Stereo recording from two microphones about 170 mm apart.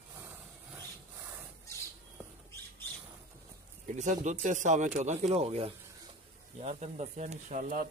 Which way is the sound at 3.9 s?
45° right (ahead or behind).